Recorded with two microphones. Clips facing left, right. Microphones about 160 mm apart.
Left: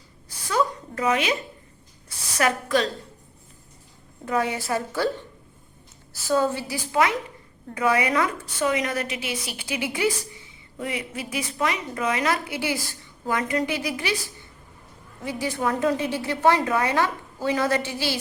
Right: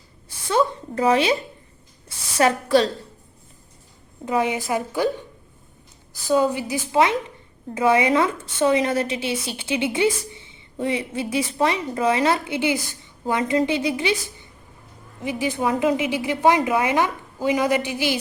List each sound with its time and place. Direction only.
0.3 s a sound: 25° right (ahead or behind)
2.0 s a woman's voice: 30° right (ahead or behind)
4.3 s a woman's voice: 20° right (ahead or behind)
15.2 s a woman's voice: 15° right (ahead or behind)